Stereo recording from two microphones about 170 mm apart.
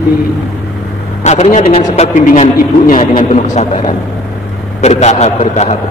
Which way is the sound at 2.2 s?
50° left (ahead or behind).